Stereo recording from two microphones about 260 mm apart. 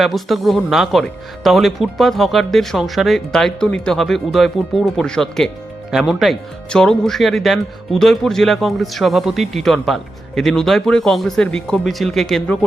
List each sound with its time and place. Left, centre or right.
0.0 s speech: centre